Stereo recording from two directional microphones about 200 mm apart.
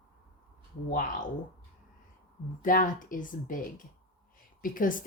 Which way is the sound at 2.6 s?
45° left (ahead or behind).